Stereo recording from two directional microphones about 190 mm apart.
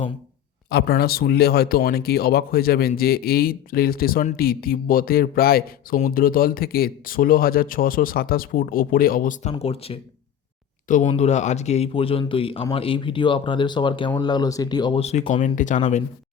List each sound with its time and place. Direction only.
0.7 s speech: 55° left (ahead or behind); by 10.0 s 30° left (ahead or behind)
10.8 s speech: 40° left (ahead or behind)